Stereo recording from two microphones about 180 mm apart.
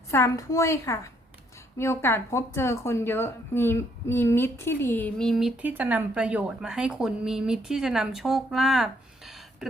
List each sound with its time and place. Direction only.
0.1 s a woman's voice: 15° left (ahead or behind); by 9.6 s centre (ahead or behind)